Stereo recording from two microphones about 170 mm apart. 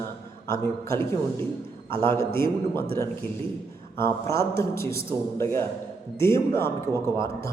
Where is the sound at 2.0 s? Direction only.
15° left (ahead or behind).